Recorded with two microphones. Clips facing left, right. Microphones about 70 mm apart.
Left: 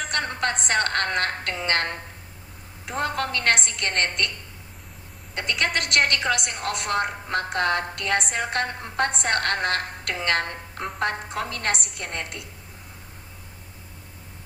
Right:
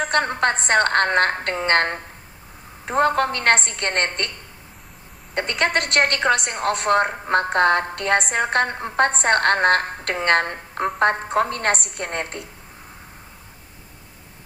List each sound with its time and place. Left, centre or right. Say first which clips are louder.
0.0 s a woman's voice: right 6 dB; right
5.3 s a woman's voice: right 4 dB; right